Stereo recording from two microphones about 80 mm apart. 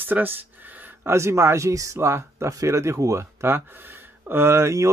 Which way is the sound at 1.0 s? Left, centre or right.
Right.